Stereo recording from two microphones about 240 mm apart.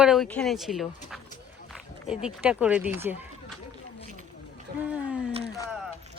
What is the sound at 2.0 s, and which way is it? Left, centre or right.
Speech, centre.